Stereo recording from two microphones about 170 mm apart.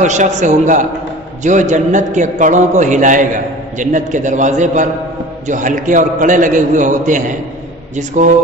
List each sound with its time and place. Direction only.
0.0 s a man's voice: 45° right (ahead or behind)